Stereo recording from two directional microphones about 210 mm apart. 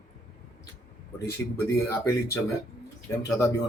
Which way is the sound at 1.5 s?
10° left (ahead or behind).